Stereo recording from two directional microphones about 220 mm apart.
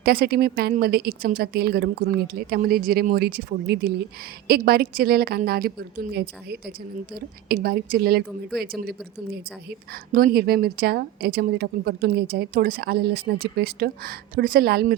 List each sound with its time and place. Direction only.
0.0 s a woman's voice: 45° right (ahead or behind)